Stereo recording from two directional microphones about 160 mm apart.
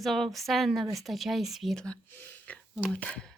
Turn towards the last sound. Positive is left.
turn(degrees=5)  # may be behind; listen again after turning